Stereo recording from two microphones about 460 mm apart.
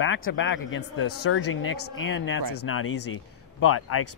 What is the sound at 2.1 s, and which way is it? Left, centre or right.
Speech, left.